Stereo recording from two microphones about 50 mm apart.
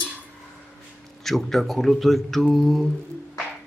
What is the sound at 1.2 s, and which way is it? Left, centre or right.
Speech, centre.